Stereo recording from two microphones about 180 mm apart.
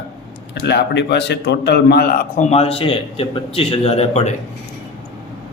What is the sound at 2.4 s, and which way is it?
A man's voice, 35° left (ahead or behind).